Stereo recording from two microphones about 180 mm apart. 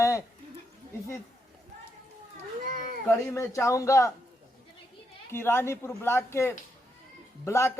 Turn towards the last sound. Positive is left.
turn(degrees=15)  # may be behind; listen again after turning